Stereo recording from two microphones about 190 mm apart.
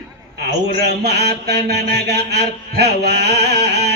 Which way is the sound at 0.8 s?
60° right (ahead or behind).